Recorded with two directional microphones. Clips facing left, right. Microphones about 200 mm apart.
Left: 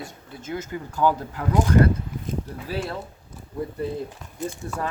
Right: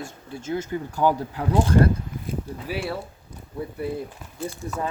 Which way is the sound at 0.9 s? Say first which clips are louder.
Even; 15° right (ahead or behind).